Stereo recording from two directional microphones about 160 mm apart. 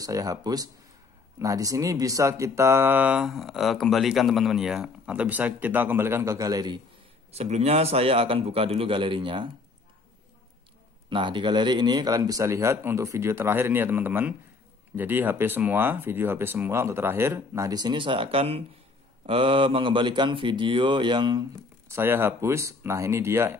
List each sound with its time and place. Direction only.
0.0 s speech: 20° right (ahead or behind)
7.2 s a man's voice: 40° right (ahead or behind)
11.1 s speech: 30° right (ahead or behind)